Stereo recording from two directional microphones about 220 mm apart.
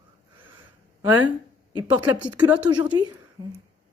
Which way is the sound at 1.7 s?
20° right (ahead or behind).